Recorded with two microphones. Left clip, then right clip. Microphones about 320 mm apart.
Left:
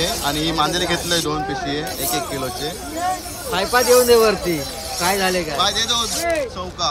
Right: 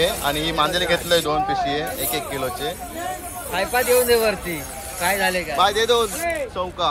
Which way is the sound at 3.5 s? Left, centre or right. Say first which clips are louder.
Left 4 dB; left.